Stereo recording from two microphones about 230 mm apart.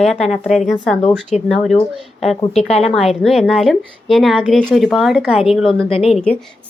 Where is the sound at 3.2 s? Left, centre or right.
Centre.